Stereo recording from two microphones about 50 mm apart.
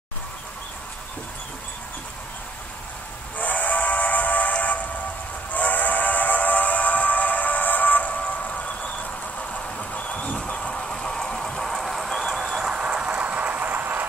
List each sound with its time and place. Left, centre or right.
3.3 s steam whistle: left
9.5 s a sound: left; by 12.4 s centre
12.4 s train: centre; by 14.0 s right